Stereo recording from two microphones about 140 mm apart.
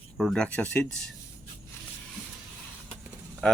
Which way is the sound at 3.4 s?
5° left (ahead or behind).